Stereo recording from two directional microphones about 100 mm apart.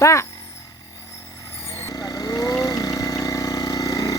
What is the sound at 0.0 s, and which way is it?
Speech, 30° left (ahead or behind).